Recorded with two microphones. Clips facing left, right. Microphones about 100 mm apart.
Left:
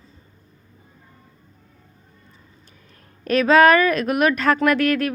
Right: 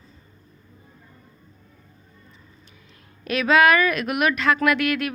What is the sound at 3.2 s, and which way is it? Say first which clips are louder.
Speech: left 4 dB; 40° left (ahead or behind).